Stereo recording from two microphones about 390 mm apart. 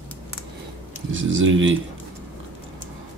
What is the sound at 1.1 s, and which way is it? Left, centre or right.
Speech, right.